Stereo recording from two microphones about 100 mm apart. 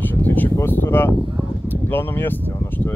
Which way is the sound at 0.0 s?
20° left (ahead or behind).